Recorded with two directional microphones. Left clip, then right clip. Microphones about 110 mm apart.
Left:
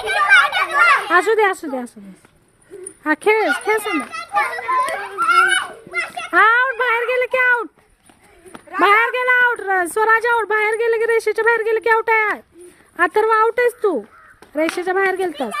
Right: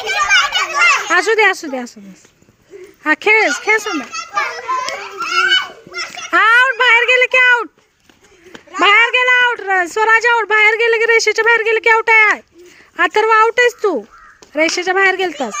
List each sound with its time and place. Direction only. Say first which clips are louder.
0.2 s children playing: even; 25° right (ahead or behind)
0.9 s speech: right 2 dB; 10° right (ahead or behind)
3.0 s a child's voice: right 4 dB; 5° left (ahead or behind)
5.2 s children playing: even; 5° left (ahead or behind)
6.3 s speech: right 3 dB; 5° right (ahead or behind)
8.8 s speech: right 4 dB; 5° left (ahead or behind)
10.4 s speech: right 6 dB; 5° right (ahead or behind)